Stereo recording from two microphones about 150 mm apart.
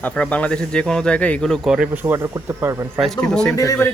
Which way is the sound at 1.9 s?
15° right (ahead or behind).